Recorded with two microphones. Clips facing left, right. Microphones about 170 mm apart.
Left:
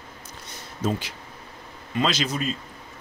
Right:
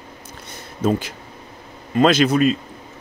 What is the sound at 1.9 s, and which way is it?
Speech, 55° right (ahead or behind).